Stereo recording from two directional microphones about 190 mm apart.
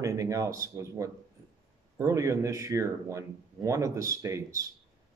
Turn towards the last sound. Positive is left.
turn(degrees=-15)  # may be behind; listen again after turning